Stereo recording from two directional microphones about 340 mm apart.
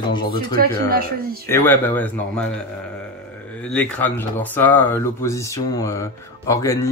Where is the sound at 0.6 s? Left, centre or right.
Right.